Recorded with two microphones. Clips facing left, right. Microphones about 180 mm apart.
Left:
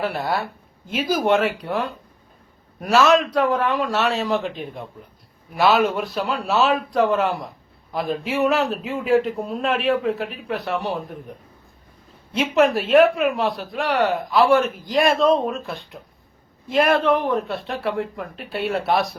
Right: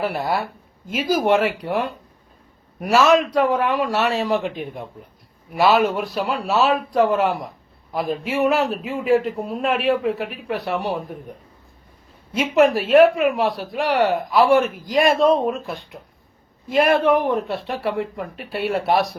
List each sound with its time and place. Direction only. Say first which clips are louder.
0.0 s a man's voice: right 1 dB; 5° right (ahead or behind)
2.8 s speech: right 1 dB; 5° right (ahead or behind)
12.3 s a man's voice: right 2 dB; 5° right (ahead or behind)